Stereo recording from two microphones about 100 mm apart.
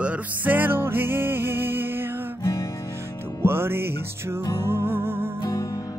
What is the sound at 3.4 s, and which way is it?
Music, 25° right (ahead or behind).